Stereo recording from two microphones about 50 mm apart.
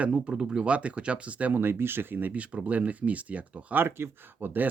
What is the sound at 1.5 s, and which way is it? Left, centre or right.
Speech, right.